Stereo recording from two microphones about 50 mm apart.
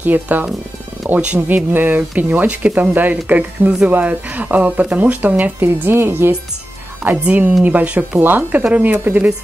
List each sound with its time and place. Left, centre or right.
0.0 s speech: right
7.0 s speech: centre
7.6 s speech: right